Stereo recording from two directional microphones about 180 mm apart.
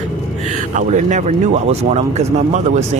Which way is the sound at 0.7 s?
40° right (ahead or behind).